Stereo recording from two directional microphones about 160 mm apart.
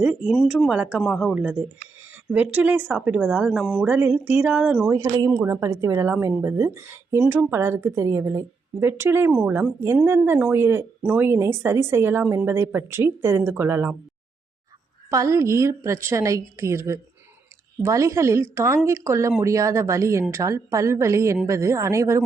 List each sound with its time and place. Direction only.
0.0 s a woman's voice: 5° right (ahead or behind)
4.9 s a woman's voice: 20° right (ahead or behind)
15.1 s a woman's voice: 20° right (ahead or behind)